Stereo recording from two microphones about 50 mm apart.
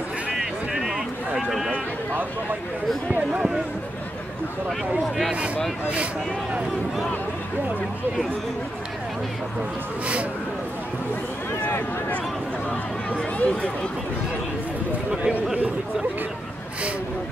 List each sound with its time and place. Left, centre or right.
0.7 s a sound: centre
4.6 s speech: centre
12.6 s speech: centre
15.0 s a man's voice: centre